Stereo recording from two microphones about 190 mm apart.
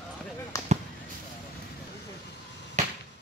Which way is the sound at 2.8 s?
35° right (ahead or behind).